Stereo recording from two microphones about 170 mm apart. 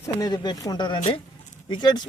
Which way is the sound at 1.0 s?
35° left (ahead or behind).